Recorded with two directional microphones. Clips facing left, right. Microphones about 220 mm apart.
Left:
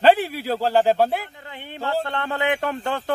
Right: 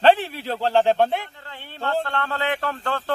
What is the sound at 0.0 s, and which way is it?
A man's voice, 10° left (ahead or behind).